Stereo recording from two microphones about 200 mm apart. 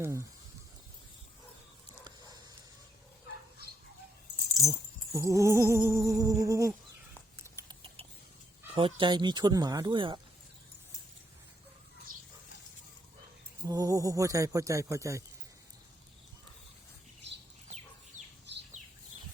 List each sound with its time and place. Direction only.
0.0 s speech: 15° right (ahead or behind)
4.4 s keys jangling: 15° left (ahead or behind)
5.1 s a sound: 15° right (ahead or behind)
7.3 s cutlery: 15° right (ahead or behind)
8.7 s speech: 25° right (ahead or behind)
13.7 s a sound: 15° right (ahead or behind)